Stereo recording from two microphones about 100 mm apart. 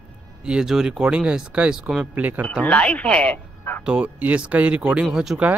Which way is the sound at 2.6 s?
15° left (ahead or behind).